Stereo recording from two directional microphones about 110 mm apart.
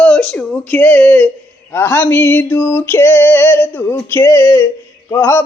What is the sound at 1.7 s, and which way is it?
Yodeling, 20° left (ahead or behind).